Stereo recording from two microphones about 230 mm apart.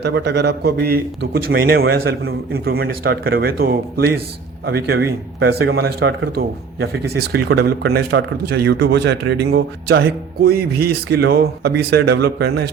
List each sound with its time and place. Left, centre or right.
0.0 s a man's voice: right